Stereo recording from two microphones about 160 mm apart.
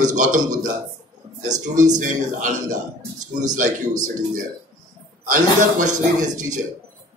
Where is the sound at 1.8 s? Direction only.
50° right (ahead or behind).